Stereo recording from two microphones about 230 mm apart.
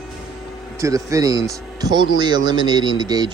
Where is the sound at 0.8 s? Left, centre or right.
Centre.